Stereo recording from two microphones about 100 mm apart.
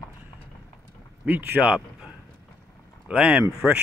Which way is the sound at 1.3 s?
15° right (ahead or behind).